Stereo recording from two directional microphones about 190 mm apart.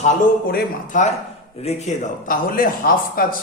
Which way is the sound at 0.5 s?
45° left (ahead or behind).